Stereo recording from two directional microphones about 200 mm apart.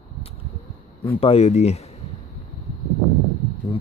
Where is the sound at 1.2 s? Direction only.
30° left (ahead or behind).